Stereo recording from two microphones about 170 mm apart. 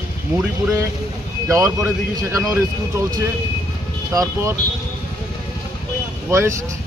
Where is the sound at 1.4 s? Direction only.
15° right (ahead or behind).